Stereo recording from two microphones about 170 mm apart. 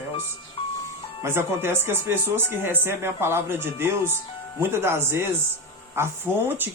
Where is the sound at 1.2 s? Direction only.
15° right (ahead or behind).